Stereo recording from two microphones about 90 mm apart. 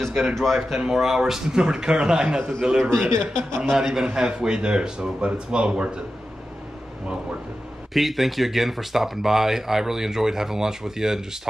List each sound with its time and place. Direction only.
0.0 s a man's voice: centre (ahead or behind)
3.0 s speech: 25° right (ahead or behind)
3.6 s a man's voice: 5° right (ahead or behind)
7.9 s speech: centre (ahead or behind)